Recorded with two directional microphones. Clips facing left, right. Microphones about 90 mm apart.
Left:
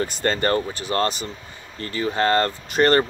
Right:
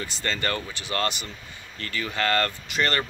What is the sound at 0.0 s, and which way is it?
Speech, 45° left (ahead or behind).